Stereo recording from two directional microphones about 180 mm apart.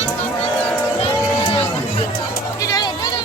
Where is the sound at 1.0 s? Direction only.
30° left (ahead or behind).